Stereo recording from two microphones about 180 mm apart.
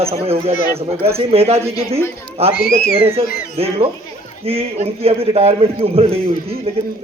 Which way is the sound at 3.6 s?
35° right (ahead or behind).